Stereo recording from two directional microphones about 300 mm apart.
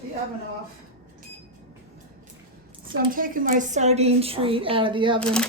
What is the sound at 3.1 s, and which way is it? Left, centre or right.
A woman's voice, right.